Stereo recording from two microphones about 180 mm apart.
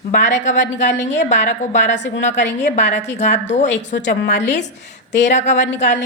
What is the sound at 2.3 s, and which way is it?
Speech, 75° left (ahead or behind).